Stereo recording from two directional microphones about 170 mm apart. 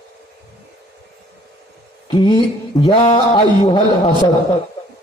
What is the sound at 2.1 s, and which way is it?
A man's voice, 30° left (ahead or behind).